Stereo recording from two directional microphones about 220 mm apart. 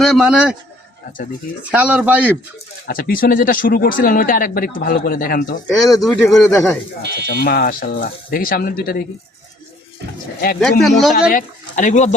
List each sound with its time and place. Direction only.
0.0 s speech: centre (ahead or behind)
1.7 s speech: 5° right (ahead or behind)
2.8 s speech: 40° left (ahead or behind)
5.6 s speech: centre (ahead or behind)
7.4 s speech: 40° left (ahead or behind)
10.6 s speech: centre (ahead or behind)
11.1 s speech: 35° left (ahead or behind)